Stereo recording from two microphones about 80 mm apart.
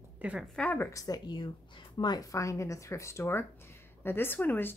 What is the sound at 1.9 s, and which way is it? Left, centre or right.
A woman's voice, left.